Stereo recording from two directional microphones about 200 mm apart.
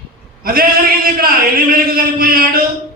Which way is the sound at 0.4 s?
45° right (ahead or behind).